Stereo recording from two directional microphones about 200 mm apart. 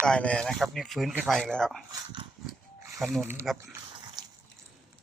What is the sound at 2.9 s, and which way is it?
Speech, centre (ahead or behind).